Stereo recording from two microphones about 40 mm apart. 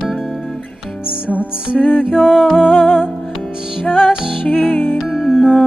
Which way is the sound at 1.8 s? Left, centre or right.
Left.